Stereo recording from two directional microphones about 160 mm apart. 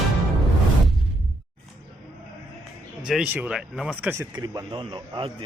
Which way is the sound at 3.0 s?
5° right (ahead or behind).